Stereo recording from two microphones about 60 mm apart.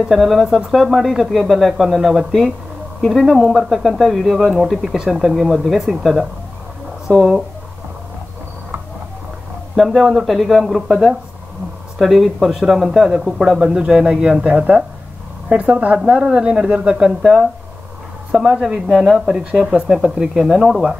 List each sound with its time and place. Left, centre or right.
0.1 s speech: centre
9.8 s speech: centre